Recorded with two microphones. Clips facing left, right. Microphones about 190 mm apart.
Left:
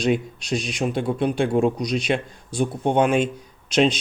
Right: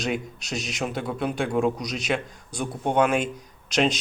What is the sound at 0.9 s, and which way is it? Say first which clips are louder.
A man's voice: left 6 dB; 25° left (ahead or behind).